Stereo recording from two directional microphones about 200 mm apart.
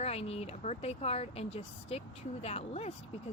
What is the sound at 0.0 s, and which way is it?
Speech, 30° left (ahead or behind).